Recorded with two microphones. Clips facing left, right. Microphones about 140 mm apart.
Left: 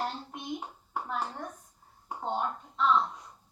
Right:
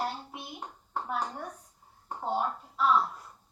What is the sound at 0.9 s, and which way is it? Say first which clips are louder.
Speech: right 1 dB; 10° left (ahead or behind).